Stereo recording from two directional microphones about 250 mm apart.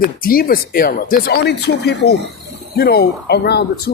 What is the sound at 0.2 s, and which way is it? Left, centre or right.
Speech, left.